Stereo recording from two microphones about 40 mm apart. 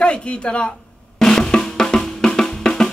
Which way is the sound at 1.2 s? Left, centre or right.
Centre.